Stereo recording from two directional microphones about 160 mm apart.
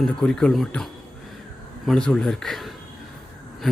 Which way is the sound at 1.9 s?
5° left (ahead or behind).